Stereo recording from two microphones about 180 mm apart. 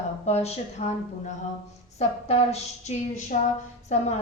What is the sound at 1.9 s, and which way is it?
Speech, 35° left (ahead or behind).